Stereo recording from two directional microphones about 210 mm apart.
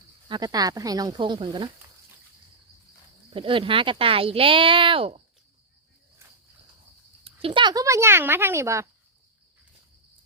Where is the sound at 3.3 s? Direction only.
25° right (ahead or behind).